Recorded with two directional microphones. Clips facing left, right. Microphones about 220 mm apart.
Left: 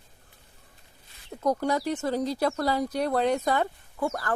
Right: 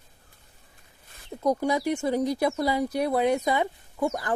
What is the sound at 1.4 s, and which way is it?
Speech, 10° right (ahead or behind).